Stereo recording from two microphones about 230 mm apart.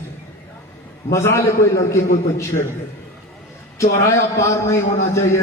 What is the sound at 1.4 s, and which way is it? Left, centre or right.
Speech, left.